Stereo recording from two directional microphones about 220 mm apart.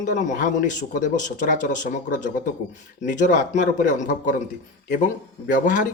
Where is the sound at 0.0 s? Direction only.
35° left (ahead or behind).